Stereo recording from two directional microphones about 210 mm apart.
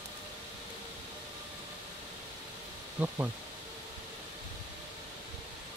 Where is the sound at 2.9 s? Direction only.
10° right (ahead or behind).